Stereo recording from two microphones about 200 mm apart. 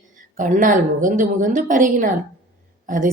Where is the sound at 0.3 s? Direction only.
40° right (ahead or behind).